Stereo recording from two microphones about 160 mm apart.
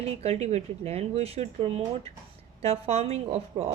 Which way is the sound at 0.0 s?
40° right (ahead or behind).